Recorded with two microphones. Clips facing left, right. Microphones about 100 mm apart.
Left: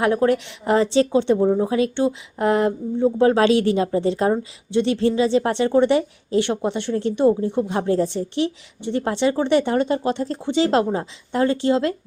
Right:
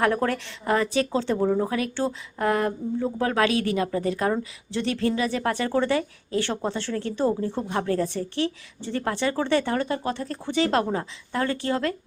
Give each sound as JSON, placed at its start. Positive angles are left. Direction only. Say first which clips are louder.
{"t": 0.0, "sound": "speech", "louder": "left 5 dB", "side_deg": 15}